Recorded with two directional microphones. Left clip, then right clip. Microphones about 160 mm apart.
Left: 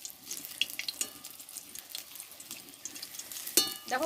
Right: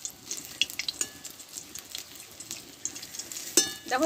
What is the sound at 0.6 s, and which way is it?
Frying, 10° left (ahead or behind).